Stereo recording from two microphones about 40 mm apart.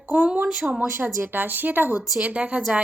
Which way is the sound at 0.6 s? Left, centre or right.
Centre.